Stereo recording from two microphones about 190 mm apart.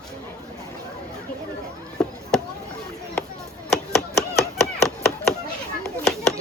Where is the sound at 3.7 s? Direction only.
5° left (ahead or behind).